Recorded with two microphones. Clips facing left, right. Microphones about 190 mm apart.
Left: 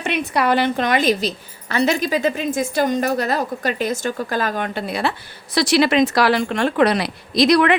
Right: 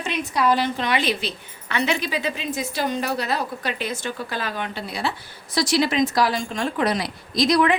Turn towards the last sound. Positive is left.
turn(degrees=70)  # may be behind; listen again after turning